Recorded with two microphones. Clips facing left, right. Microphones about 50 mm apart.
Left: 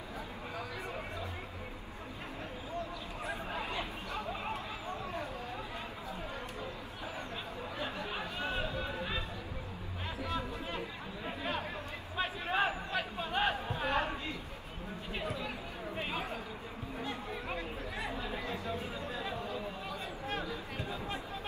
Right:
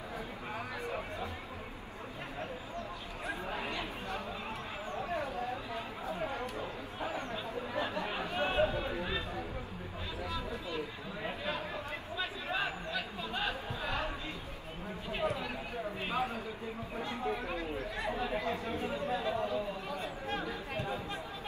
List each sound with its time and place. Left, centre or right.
3.3 s a sound: right
5.1 s chatter: right
7.7 s chatter: right
12.2 s chatter: left
15.2 s a sound: right
18.1 s chatter: right